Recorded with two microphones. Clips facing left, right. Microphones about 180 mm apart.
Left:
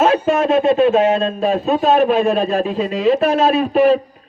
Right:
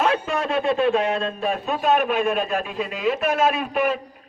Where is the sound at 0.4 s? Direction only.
20° left (ahead or behind).